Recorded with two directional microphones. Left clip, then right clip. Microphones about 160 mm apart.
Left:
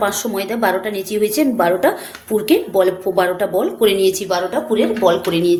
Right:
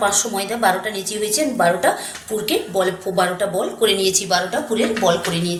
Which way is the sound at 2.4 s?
75° left (ahead or behind).